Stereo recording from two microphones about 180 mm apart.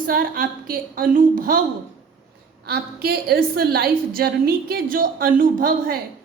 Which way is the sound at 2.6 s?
60° right (ahead or behind).